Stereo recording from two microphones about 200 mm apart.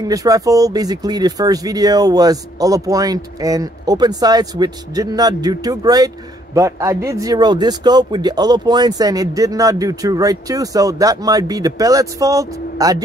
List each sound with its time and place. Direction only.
0.1 s a man's voice: 15° right (ahead or behind)